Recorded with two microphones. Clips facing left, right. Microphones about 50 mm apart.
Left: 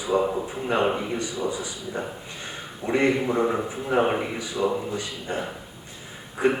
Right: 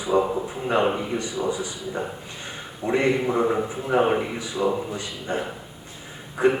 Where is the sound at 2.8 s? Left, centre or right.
Centre.